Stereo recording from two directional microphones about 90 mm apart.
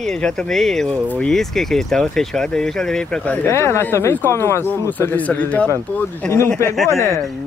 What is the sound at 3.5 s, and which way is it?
Speech, 30° left (ahead or behind).